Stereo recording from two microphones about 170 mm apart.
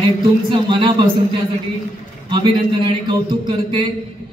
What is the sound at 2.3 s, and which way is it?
Speech, 25° right (ahead or behind).